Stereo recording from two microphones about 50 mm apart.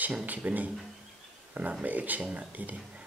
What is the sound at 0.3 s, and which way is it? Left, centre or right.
Speech, right.